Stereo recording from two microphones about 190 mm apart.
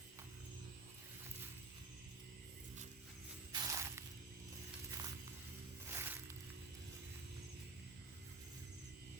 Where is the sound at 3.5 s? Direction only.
20° right (ahead or behind).